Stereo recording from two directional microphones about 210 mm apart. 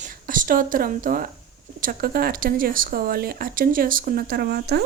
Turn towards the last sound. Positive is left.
turn(degrees=-50)  # may be behind; listen again after turning